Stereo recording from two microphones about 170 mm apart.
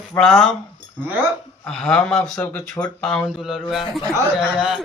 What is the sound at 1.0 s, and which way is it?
Speech, 10° right (ahead or behind).